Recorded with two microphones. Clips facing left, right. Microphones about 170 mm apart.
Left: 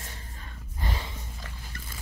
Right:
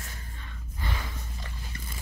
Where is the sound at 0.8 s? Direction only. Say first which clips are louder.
Left 1 dB; 35° left (ahead or behind).